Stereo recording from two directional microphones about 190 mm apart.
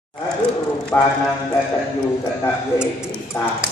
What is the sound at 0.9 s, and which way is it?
Speech, 10° left (ahead or behind).